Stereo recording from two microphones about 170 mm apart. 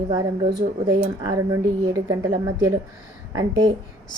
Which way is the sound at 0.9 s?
20° right (ahead or behind).